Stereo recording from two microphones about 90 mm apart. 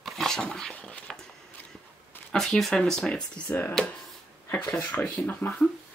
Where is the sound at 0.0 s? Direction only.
Centre (ahead or behind).